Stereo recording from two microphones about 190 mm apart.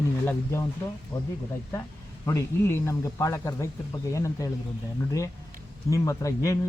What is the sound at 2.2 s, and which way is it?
Speech, 15° left (ahead or behind).